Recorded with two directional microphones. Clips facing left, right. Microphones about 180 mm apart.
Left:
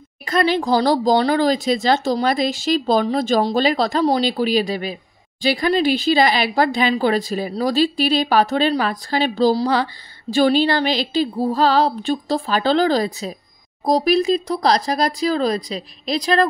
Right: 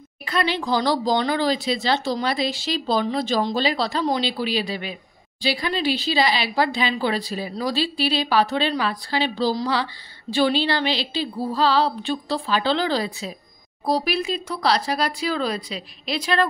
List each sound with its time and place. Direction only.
0.2 s speech: 45° left (ahead or behind)